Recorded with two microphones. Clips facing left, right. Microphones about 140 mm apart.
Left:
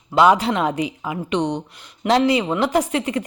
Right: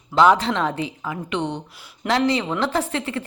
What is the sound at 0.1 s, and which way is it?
Speech, 10° left (ahead or behind).